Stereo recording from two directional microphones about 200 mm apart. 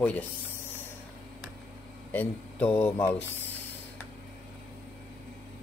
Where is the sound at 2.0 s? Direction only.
5° left (ahead or behind).